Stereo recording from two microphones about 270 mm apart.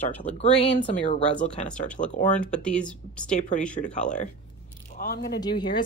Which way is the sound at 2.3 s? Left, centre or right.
Centre.